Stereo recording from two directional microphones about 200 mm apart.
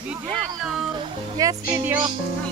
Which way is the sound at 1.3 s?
15° right (ahead or behind).